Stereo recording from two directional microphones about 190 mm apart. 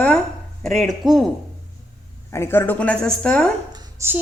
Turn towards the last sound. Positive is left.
turn(degrees=-10)  # may be behind; listen again after turning